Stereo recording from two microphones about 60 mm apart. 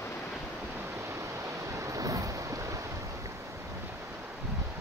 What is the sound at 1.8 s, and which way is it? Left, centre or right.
Waves, right.